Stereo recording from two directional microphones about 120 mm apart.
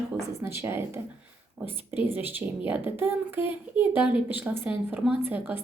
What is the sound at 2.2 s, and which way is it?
A woman's voice, 15° right (ahead or behind).